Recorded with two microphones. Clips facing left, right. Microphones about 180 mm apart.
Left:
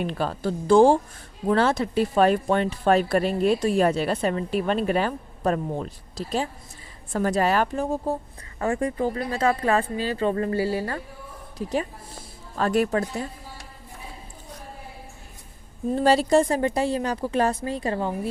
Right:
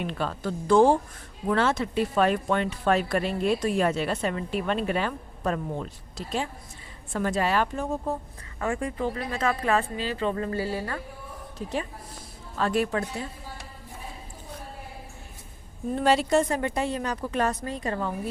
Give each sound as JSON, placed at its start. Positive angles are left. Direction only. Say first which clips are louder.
{"t": 0.0, "sound": "a woman's voice", "louder": "left 4 dB", "side_deg": 40}
{"t": 16.0, "sound": "speech", "louder": "left 3 dB", "side_deg": 35}